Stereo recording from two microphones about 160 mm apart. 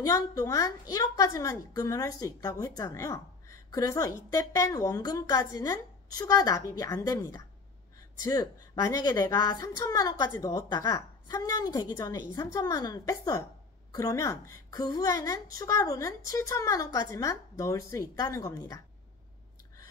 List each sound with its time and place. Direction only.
0.0 s a woman's voice: 20° left (ahead or behind)